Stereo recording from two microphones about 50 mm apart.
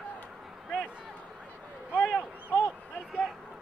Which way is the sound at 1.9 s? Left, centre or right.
Left.